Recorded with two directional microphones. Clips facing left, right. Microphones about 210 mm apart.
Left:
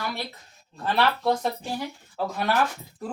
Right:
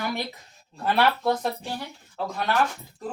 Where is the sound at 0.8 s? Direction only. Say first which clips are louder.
Right 1 dB; 5° right (ahead or behind).